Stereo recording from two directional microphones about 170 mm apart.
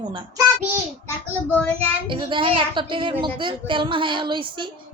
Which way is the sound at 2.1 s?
30° right (ahead or behind).